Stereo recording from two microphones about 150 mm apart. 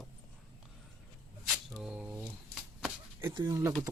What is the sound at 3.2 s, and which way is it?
Speech, 20° right (ahead or behind).